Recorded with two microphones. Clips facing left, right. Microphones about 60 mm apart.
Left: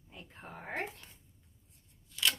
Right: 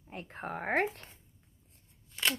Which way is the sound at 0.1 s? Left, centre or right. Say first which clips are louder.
Right 10 dB; right.